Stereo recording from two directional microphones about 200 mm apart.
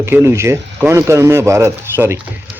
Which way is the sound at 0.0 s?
15° right (ahead or behind).